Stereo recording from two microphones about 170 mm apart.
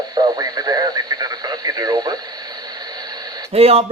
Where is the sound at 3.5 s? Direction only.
35° right (ahead or behind).